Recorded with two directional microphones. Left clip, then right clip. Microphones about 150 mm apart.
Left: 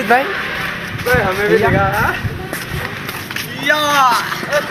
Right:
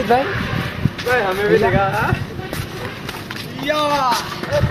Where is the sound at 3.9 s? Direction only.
15° left (ahead or behind).